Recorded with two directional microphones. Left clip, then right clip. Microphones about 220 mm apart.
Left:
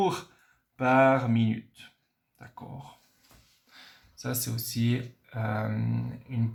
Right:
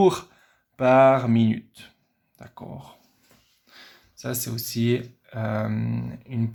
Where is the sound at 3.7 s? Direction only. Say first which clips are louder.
Right 3 dB; 40° right (ahead or behind).